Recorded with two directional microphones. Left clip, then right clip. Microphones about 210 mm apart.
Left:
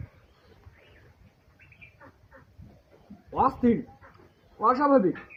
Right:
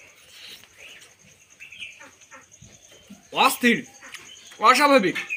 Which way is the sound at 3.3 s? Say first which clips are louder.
Right 5 dB; 35° right (ahead or behind).